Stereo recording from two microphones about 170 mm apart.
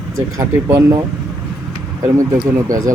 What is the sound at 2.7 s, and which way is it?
Speech, 20° right (ahead or behind).